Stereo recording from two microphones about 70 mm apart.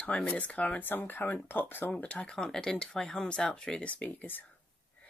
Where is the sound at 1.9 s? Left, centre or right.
Centre.